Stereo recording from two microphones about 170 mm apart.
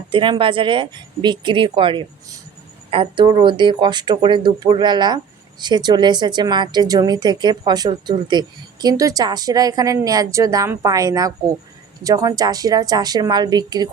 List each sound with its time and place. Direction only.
0.1 s speech: 30° right (ahead or behind)